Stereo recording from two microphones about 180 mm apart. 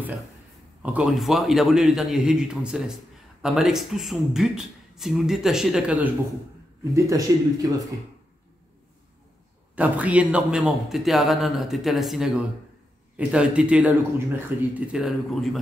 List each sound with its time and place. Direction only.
0.9 s a man's voice: centre (ahead or behind)
6.8 s speech: 15° right (ahead or behind)
9.8 s a man's voice: 10° right (ahead or behind)